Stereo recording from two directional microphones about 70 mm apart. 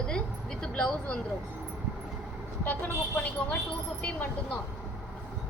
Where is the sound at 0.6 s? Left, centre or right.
Centre.